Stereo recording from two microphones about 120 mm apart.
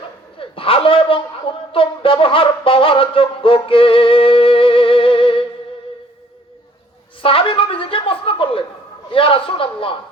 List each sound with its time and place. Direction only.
0.3 s a man's voice: 50° left (ahead or behind)
7.2 s a woman's voice: 50° left (ahead or behind)